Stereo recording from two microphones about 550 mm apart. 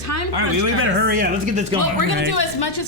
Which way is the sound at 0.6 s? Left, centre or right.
Centre.